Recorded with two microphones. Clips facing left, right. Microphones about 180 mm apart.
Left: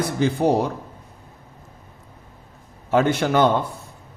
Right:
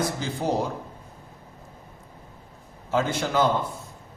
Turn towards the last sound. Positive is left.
turn(degrees=60)  # may be behind; listen again after turning